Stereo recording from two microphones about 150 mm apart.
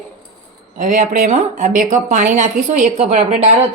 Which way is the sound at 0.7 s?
55° right (ahead or behind).